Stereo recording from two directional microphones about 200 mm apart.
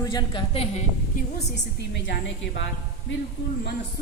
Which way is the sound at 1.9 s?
60° left (ahead or behind).